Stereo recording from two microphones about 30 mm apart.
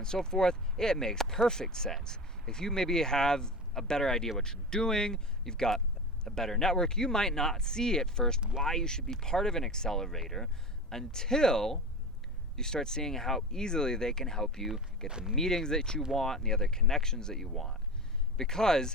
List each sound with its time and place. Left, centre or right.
0.3 s speech: left
1.2 s speech: centre
1.5 s speech: left
8.4 s speech: right
8.7 s speech: left
15.0 s speech: centre
15.4 s speech: centre
17.4 s speech: centre